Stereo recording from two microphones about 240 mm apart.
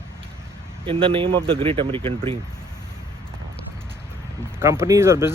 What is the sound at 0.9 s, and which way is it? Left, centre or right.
Speech, right.